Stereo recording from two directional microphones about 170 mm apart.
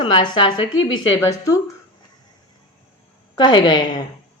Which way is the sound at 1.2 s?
15° left (ahead or behind).